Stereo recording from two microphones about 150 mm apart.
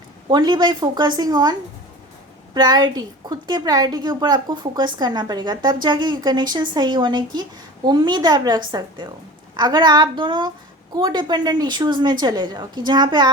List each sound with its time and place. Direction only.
0.3 s a woman's voice: 30° right (ahead or behind)
2.6 s a woman's voice: 30° right (ahead or behind)